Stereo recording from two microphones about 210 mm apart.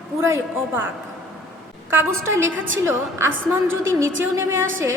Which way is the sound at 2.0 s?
70° right (ahead or behind).